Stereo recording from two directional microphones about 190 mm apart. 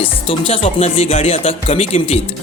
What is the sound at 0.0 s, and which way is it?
Speech, 30° left (ahead or behind).